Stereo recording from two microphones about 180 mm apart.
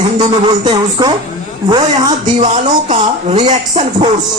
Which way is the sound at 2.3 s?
40° right (ahead or behind).